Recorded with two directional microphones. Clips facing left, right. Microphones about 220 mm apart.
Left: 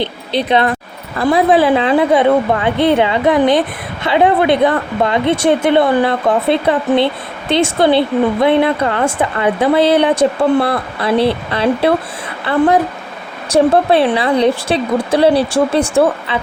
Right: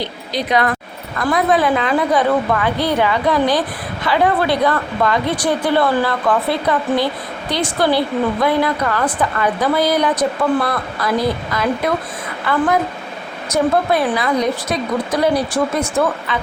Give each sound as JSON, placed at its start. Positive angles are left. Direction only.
{"t": 0.0, "sound": "a woman's voice", "side_deg": 25}